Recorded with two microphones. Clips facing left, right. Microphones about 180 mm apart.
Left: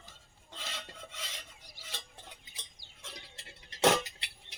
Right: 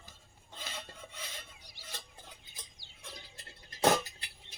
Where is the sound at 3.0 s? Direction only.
80° left.